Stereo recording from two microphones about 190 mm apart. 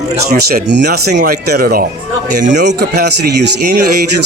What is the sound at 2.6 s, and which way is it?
Speech, 60° right (ahead or behind).